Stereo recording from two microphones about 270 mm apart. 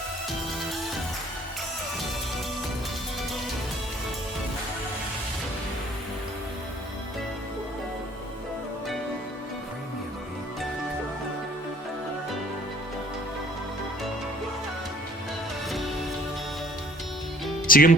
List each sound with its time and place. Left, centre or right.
17.7 s speech: left